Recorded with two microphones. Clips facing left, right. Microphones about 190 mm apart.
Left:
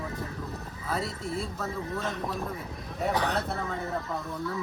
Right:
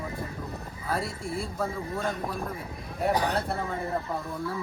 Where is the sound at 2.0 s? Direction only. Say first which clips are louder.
Right 3 dB; 10° right (ahead or behind).